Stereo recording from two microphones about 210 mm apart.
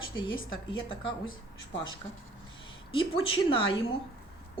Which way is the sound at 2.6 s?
25° left (ahead or behind).